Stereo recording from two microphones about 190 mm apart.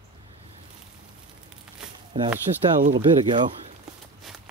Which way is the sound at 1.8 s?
5° right (ahead or behind).